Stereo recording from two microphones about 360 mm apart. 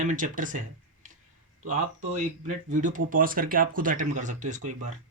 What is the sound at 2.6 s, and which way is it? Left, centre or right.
Speech, right.